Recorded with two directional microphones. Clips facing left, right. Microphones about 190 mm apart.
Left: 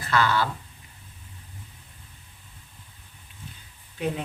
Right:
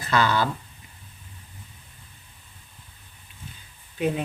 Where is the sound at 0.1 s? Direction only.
20° right (ahead or behind).